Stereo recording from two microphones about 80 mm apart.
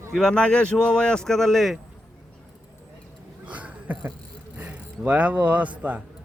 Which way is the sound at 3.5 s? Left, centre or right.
Centre.